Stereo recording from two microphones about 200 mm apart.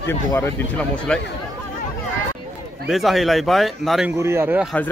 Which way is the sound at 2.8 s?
Centre (ahead or behind).